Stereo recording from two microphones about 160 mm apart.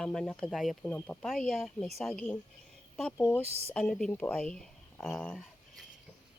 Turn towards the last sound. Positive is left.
turn(degrees=15)  # may be behind; listen again after turning